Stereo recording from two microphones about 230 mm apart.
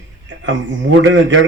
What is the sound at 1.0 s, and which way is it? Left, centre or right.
Speech, right.